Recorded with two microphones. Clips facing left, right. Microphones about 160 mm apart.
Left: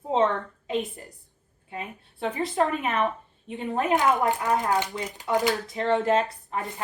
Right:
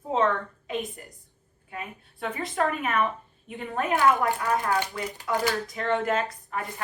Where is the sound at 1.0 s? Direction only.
30° left (ahead or behind).